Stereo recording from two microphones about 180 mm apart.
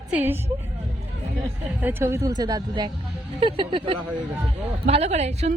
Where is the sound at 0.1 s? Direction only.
10° right (ahead or behind).